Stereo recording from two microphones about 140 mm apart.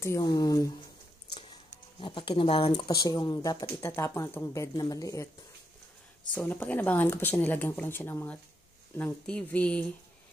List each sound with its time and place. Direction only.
0.0 s speech: 25° left (ahead or behind)
1.3 s a sound: 35° left (ahead or behind)
2.7 s speech: 30° left (ahead or behind)
3.8 s speech: 20° left (ahead or behind)
6.3 s speech: 15° left (ahead or behind)